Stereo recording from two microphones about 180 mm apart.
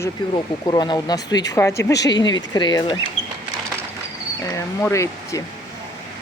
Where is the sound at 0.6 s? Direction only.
25° left (ahead or behind).